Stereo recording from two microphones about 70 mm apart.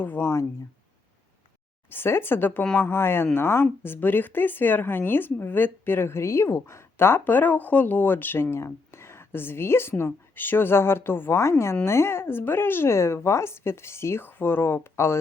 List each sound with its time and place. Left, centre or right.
0.0 s speech: left
1.9 s speech: left